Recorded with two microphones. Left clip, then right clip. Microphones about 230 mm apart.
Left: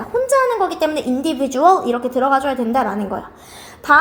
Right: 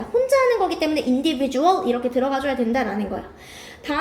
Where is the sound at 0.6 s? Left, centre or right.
Left.